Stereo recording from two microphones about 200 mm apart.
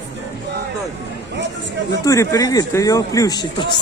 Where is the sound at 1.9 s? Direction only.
15° left (ahead or behind).